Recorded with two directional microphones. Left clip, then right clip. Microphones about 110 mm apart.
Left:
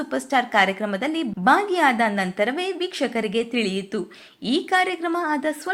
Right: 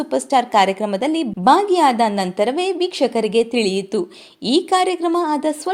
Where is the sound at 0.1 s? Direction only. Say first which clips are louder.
Right 5 dB; 30° right (ahead or behind).